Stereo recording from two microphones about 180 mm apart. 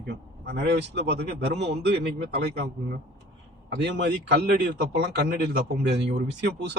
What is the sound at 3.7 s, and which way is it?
A man's voice, 70° right (ahead or behind).